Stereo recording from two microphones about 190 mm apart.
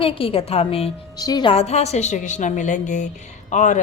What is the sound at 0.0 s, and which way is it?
A woman's voice, 30° left (ahead or behind).